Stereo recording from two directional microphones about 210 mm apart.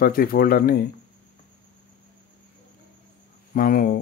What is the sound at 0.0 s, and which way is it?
Speech, 45° left (ahead or behind).